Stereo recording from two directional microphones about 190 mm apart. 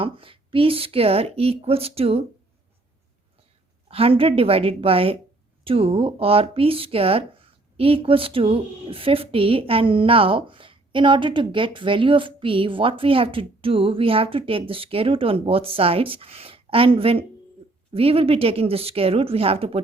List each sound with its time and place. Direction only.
0.0 s speech: 30° right (ahead or behind)
3.8 s a woman's voice: 30° right (ahead or behind)